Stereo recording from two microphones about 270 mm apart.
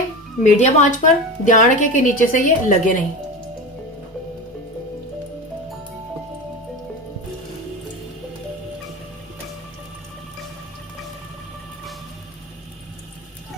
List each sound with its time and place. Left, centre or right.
0.4 s speech: left